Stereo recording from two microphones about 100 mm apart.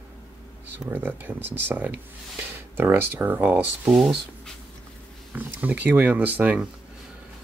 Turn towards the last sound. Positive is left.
turn(degrees=-15)  # may be behind; listen again after turning